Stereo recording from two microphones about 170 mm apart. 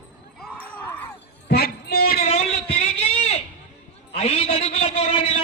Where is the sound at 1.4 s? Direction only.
65° left (ahead or behind).